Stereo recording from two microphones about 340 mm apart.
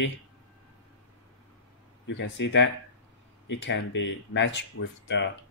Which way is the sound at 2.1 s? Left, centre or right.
Left.